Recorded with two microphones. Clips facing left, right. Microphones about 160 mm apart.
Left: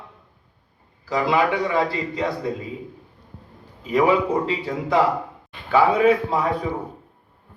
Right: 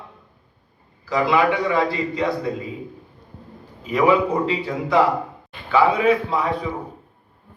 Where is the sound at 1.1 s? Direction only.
40° left (ahead or behind).